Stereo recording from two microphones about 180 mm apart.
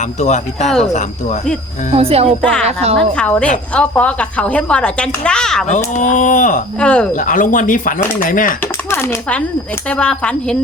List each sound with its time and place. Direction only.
0.2 s speech: 40° left (ahead or behind)
1.9 s speech: 35° right (ahead or behind)
2.4 s speech: 5° left (ahead or behind)
2.6 s speech: 35° right (ahead or behind)
3.2 s a woman's voice: 5° left (ahead or behind)
5.6 s speech: 45° left (ahead or behind)
6.7 s speech: 5° left (ahead or behind)
7.2 s speech: 45° left (ahead or behind)
8.6 s a sound: 15° left (ahead or behind)
9.9 s speech: 5° left (ahead or behind)